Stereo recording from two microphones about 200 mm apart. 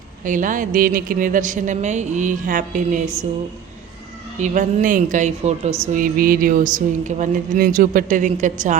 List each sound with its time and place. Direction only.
0.3 s speech: 40° right (ahead or behind)
4.4 s speech: 40° right (ahead or behind)
6.0 s speech: 45° right (ahead or behind)